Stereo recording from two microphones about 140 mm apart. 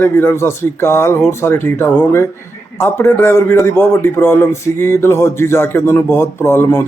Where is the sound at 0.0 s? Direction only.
15° left (ahead or behind).